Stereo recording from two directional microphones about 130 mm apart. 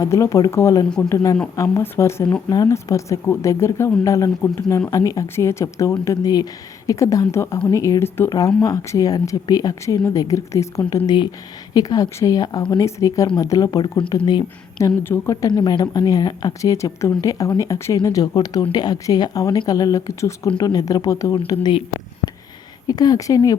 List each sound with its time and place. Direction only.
0.0 s a woman's voice: 25° left (ahead or behind)
8.3 s a woman's voice: 30° left (ahead or behind)
14.8 s a woman's voice: 20° left (ahead or behind)
22.9 s a woman's voice: 30° left (ahead or behind)